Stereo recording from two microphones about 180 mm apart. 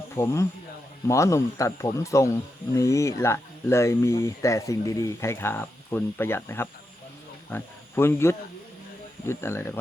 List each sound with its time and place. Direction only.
0.2 s speech: 15° left (ahead or behind)